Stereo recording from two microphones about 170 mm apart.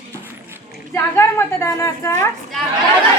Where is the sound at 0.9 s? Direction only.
15° left (ahead or behind).